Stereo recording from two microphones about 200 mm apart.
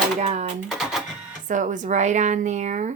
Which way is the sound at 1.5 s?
40° right (ahead or behind).